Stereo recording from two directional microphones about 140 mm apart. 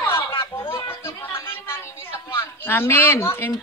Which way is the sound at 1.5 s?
15° left (ahead or behind).